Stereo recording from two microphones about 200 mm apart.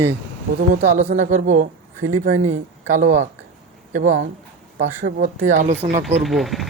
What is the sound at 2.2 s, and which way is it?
Speech, 80° right.